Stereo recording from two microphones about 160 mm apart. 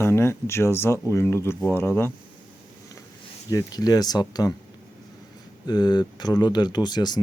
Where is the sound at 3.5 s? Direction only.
25° left (ahead or behind).